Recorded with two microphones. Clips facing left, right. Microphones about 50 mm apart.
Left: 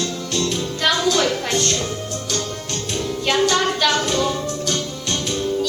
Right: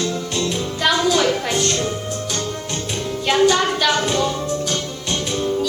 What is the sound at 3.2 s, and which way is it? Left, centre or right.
Music, centre.